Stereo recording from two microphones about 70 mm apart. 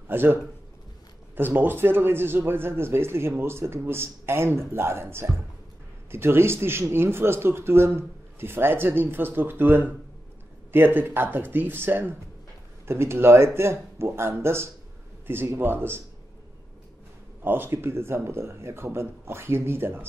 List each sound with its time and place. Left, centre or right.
0.1 s a man's voice: right
17.4 s speech: right